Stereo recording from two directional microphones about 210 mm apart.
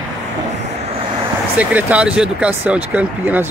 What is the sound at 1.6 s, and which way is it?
Speech, 5° right (ahead or behind).